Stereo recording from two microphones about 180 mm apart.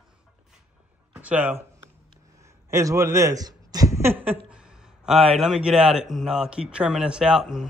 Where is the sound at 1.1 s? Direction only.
10° right (ahead or behind).